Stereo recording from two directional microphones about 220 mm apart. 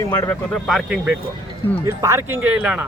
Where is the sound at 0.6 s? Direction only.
Centre (ahead or behind).